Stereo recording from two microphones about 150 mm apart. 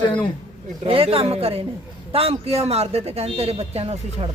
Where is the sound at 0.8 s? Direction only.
40° right (ahead or behind).